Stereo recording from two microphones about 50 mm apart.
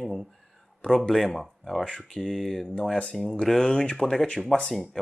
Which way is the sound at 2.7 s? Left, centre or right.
Centre.